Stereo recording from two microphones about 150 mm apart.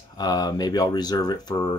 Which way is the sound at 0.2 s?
25° left (ahead or behind).